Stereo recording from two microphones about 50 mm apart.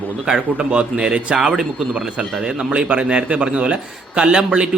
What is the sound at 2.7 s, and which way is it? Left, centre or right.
A man's voice, right.